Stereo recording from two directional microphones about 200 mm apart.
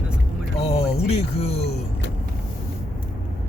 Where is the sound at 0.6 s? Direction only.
30° left (ahead or behind).